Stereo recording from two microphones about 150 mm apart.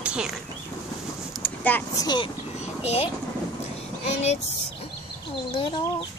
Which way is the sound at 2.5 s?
45° left (ahead or behind).